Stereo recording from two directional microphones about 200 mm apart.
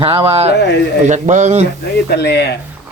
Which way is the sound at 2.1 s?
55° left (ahead or behind).